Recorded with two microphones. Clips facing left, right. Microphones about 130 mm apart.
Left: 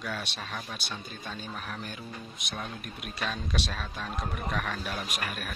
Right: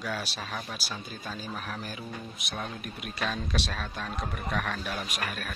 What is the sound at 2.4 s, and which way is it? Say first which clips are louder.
Speech: right 1 dB; centre (ahead or behind).